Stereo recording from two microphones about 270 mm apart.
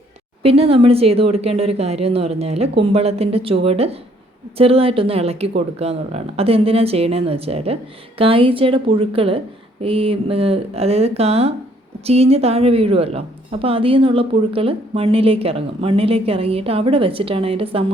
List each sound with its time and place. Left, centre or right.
0.4 s a woman's voice: right